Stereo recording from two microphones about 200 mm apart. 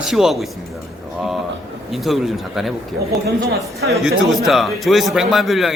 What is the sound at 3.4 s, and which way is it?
Speech, 50° right (ahead or behind).